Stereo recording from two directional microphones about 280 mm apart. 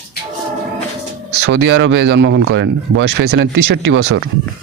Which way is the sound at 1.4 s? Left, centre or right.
Right.